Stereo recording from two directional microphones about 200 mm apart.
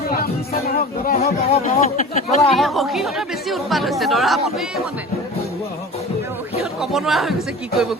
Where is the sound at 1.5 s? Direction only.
35° left (ahead or behind).